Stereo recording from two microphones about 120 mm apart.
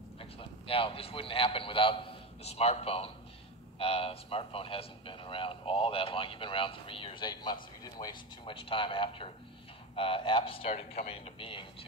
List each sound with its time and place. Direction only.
0.2 s a man's voice: 50° left (ahead or behind)